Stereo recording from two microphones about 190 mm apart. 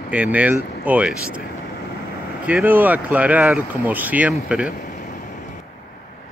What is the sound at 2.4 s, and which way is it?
Speech, 10° right (ahead or behind).